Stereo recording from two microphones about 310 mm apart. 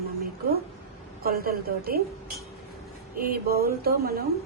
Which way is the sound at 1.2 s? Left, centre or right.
Right.